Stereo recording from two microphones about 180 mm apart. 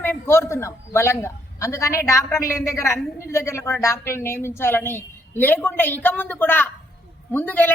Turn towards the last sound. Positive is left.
turn(degrees=10)  # may be behind; listen again after turning